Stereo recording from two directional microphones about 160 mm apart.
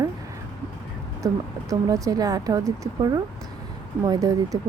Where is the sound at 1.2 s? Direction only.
25° right (ahead or behind).